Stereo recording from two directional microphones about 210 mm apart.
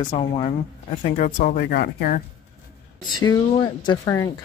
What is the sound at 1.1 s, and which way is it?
Speech, 35° left (ahead or behind).